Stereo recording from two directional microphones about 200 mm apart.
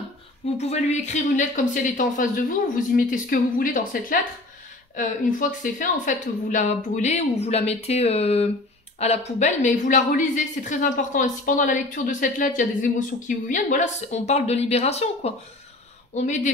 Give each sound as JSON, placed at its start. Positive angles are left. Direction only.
{"t": 0.6, "sound": "a woman's voice", "side_deg": 35}